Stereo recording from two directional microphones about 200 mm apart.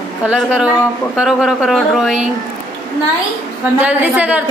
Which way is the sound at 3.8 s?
5° right (ahead or behind).